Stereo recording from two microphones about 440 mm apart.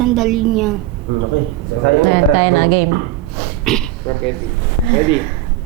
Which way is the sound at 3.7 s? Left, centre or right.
Centre.